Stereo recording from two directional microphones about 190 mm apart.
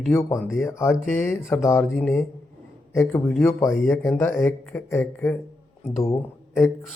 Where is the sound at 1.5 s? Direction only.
15° left (ahead or behind).